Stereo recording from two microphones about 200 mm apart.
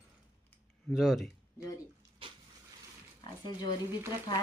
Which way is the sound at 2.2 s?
25° right (ahead or behind).